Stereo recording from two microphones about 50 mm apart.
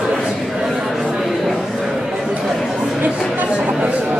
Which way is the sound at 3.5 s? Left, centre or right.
Centre.